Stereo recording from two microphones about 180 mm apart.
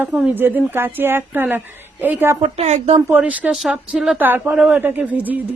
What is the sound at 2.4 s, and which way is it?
Speech, 35° right (ahead or behind).